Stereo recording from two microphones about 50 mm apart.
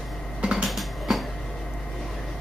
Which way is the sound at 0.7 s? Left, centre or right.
Centre.